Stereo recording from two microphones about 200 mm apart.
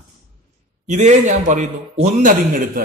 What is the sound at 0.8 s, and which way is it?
A man's voice, 35° right (ahead or behind).